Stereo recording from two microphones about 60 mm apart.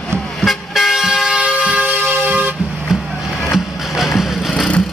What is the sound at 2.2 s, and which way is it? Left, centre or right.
Vehicle, right.